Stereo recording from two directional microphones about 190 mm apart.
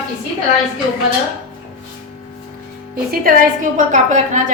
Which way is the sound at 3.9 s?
40° right (ahead or behind).